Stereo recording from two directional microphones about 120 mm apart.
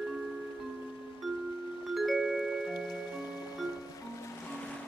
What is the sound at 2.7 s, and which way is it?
Music, 35° left (ahead or behind).